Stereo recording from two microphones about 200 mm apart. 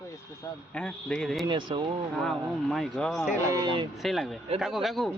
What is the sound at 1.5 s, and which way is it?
Speech, 20° right (ahead or behind).